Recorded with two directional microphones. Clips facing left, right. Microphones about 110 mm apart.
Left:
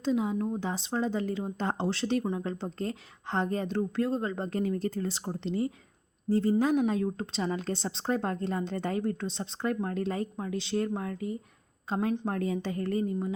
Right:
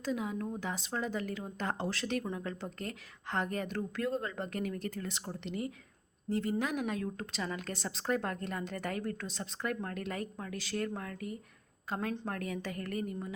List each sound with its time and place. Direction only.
0.0 s a woman's voice: 25° left (ahead or behind)